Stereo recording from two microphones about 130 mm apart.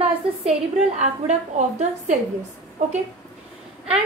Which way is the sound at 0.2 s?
45° right (ahead or behind).